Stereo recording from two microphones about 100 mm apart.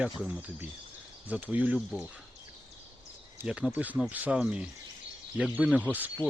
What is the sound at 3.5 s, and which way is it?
Speech, 10° right (ahead or behind).